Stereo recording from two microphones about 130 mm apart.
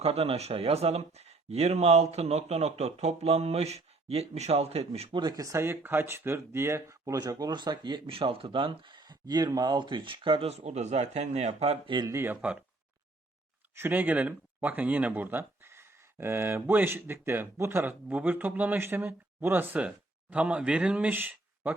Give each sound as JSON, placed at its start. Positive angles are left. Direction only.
{"t": 0.0, "sound": "speech", "side_deg": -50}
{"t": 5.1, "sound": "speech", "side_deg": -30}
{"t": 11.9, "sound": "speech", "side_deg": -35}
{"t": 12.1, "sound": "speech", "side_deg": -15}
{"t": 13.7, "sound": "speech", "side_deg": -15}